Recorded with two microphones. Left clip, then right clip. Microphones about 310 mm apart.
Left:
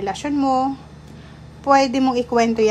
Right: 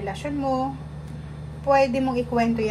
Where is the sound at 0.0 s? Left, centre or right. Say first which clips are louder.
Left 6 dB; left.